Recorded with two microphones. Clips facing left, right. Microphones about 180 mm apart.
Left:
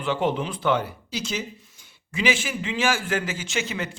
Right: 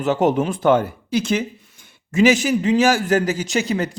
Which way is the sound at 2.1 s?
40° right (ahead or behind).